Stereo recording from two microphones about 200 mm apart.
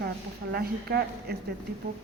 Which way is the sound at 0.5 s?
50° right (ahead or behind).